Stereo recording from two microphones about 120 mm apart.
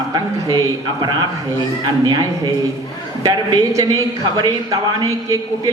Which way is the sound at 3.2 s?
30° right (ahead or behind).